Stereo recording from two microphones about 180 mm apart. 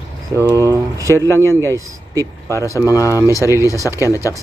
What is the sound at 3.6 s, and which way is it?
Speech, 20° left (ahead or behind).